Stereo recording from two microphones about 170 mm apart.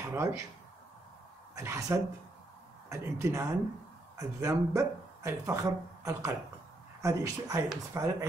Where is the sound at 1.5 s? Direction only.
15° right (ahead or behind).